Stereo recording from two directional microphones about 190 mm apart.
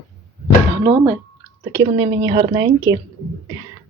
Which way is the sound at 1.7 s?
25° right (ahead or behind).